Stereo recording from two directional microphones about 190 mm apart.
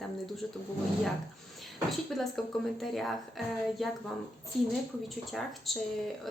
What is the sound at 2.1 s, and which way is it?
Speech, centre (ahead or behind).